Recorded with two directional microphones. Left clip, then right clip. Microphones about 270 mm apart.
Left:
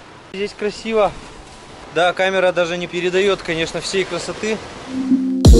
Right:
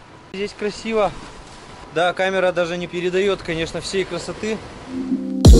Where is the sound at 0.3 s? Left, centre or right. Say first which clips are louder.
Left 2 dB; centre.